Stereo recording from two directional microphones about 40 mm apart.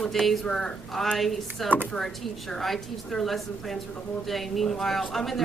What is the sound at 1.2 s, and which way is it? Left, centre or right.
Speech, centre.